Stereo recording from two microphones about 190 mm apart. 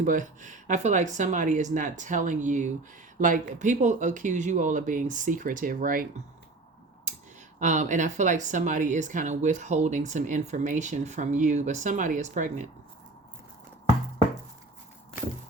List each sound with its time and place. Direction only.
0.0 s speech: 45° right (ahead or behind)
7.6 s speech: 40° right (ahead or behind)